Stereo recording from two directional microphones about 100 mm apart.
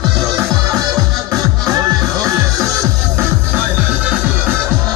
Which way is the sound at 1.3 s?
35° right (ahead or behind).